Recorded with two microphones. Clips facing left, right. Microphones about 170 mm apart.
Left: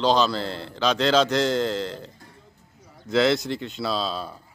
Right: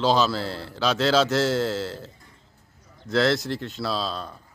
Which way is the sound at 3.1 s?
Centre (ahead or behind).